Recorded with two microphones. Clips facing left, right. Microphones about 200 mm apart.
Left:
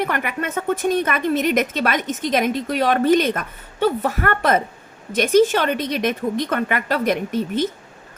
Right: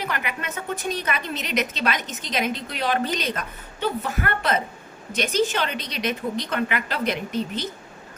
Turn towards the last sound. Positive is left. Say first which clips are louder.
# left 5 dB
turn(degrees=50)  # may be behind; listen again after turning